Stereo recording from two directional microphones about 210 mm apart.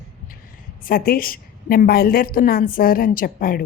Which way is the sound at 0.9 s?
45° left (ahead or behind).